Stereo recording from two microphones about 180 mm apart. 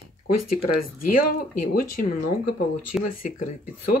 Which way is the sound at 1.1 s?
50° left (ahead or behind).